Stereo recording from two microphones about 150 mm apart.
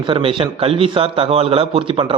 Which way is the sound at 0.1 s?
35° right (ahead or behind).